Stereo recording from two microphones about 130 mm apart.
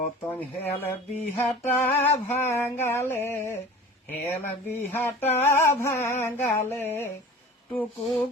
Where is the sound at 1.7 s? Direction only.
15° left (ahead or behind).